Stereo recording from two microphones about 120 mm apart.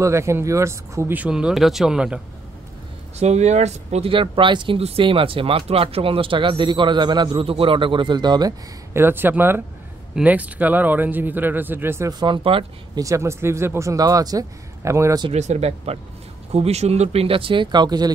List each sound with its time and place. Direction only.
0.0 s speech: 25° right (ahead or behind); by 2.2 s 5° right (ahead or behind)
3.2 s speech: 70° right (ahead or behind)
4.1 s speech: 45° right (ahead or behind)
8.9 s speech: 20° right (ahead or behind)
12.1 s speech: 40° right (ahead or behind)
12.9 s speech: 25° right (ahead or behind)
15.3 s speech: 70° right (ahead or behind); by 18.1 s 35° right (ahead or behind)